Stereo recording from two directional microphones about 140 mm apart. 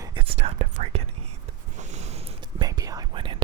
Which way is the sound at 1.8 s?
55° right (ahead or behind).